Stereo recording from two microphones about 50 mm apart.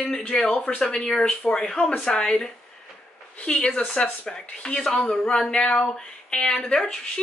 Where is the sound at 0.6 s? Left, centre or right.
Centre.